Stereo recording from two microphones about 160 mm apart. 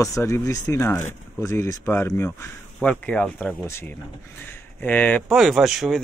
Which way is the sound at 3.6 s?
15° left (ahead or behind).